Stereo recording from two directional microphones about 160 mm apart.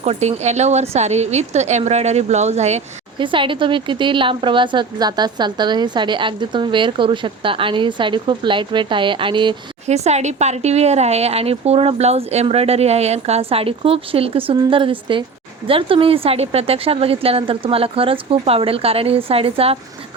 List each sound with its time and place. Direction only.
0.0 s a woman's voice: 45° right (ahead or behind)
3.2 s speech: 30° right (ahead or behind)
9.8 s speech: 45° right (ahead or behind)